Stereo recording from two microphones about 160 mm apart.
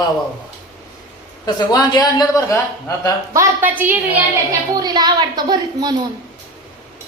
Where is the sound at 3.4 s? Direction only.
10° right (ahead or behind).